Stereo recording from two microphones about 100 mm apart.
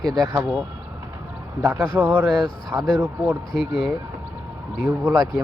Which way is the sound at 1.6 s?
20° right (ahead or behind).